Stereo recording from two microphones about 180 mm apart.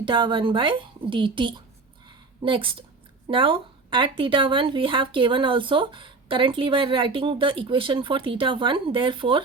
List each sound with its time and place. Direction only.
0.0 s speech: 25° right (ahead or behind)